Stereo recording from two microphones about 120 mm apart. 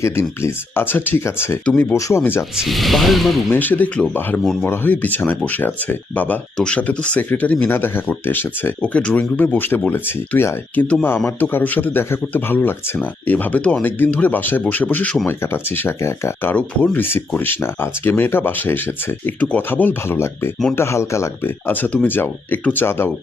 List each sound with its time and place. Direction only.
0.0 s speech: 20° left (ahead or behind)
2.0 s speech: 25° left (ahead or behind)
2.6 s speech: centre (ahead or behind)
3.5 s speech: 15° left (ahead or behind)
15.3 s speech: 20° left (ahead or behind)